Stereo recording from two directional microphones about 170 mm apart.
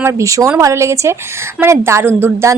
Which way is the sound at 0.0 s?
20° right (ahead or behind).